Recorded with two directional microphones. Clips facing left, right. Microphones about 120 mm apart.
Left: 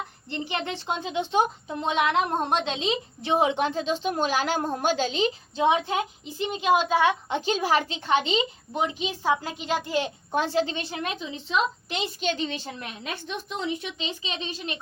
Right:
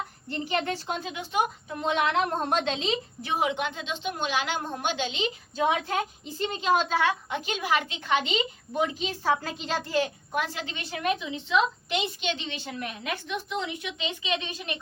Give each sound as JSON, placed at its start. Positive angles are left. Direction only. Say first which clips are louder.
{"t": 0.3, "sound": "a woman's voice", "louder": "right 2 dB", "side_deg": 20}
{"t": 5.5, "sound": "a woman's voice", "louder": "left 3 dB", "side_deg": 20}